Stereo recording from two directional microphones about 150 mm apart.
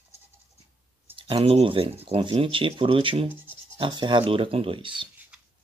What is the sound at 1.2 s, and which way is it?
Speech, 35° right (ahead or behind).